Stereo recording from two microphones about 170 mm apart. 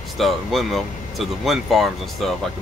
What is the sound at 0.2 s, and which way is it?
Speech, centre (ahead or behind).